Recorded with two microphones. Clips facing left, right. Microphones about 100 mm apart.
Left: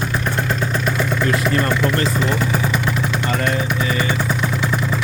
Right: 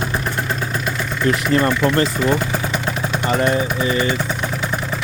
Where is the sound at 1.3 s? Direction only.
20° right (ahead or behind).